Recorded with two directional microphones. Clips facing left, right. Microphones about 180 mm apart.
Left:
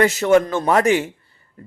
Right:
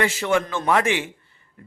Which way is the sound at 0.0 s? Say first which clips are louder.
Left 7 dB; 40° left (ahead or behind).